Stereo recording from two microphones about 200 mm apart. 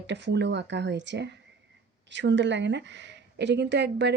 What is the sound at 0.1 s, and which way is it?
A woman's voice, 60° right (ahead or behind).